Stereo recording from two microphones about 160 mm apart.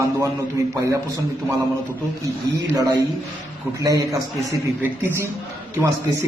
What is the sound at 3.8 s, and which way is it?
A man's voice, 20° right (ahead or behind).